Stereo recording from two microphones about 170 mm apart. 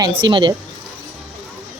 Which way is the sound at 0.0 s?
25° right (ahead or behind).